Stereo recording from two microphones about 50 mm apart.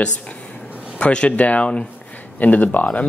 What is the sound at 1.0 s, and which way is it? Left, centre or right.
Speech, left.